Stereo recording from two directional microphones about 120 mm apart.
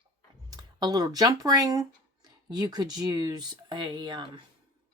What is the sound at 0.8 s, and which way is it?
Speech, 35° right (ahead or behind).